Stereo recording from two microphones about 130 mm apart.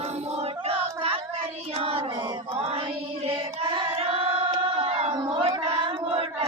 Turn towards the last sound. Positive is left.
turn(degrees=-50)  # may be behind; listen again after turning